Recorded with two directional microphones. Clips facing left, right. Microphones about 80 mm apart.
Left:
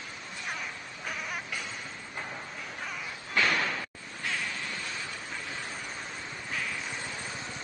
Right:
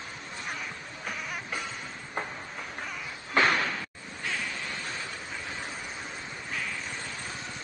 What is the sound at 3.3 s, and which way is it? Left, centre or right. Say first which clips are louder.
Slam: right 3 dB; right.